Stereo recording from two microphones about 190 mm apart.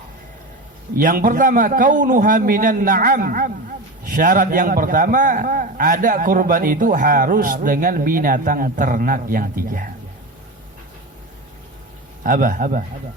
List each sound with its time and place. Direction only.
0.9 s a man's voice: 45° right (ahead or behind)
12.2 s a man's voice: 45° right (ahead or behind)